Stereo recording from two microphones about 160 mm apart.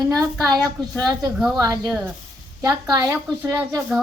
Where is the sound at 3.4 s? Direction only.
15° right (ahead or behind).